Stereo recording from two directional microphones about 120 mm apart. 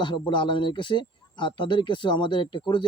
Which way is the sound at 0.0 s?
40° left (ahead or behind).